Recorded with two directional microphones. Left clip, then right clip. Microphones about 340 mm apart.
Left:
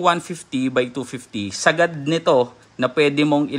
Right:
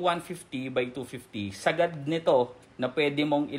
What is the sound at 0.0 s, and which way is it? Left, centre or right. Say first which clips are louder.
A man's voice: left 9 dB; centre.